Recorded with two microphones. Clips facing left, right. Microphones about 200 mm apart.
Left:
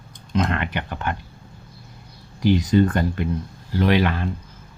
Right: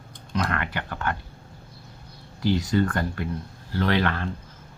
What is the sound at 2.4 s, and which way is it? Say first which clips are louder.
Speech: left 5 dB; 15° left (ahead or behind).